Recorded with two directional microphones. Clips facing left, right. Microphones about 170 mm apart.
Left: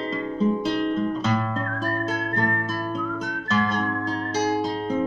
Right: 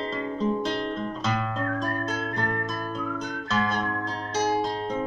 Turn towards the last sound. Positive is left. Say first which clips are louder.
# left 3 dB
turn(degrees=5)  # may be behind; listen again after turning